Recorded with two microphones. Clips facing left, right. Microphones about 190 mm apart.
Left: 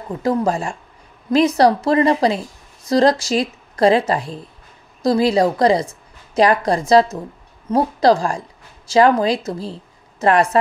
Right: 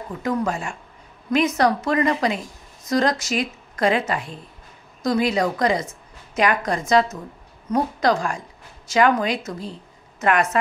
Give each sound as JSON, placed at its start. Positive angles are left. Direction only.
{"t": 0.1, "sound": "a woman's voice", "side_deg": 30}